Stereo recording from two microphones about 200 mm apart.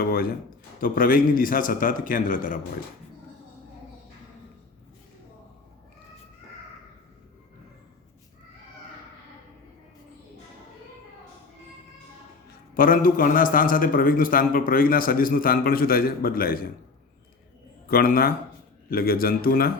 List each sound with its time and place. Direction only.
0.0 s a sound: 50° left (ahead or behind)
0.8 s a man's voice: 45° left (ahead or behind)
12.5 s a man's voice: 45° left (ahead or behind)
17.8 s a man's voice: 45° left (ahead or behind)